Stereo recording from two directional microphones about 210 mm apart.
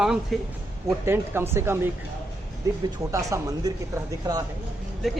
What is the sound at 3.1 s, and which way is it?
Speech, 15° right (ahead or behind).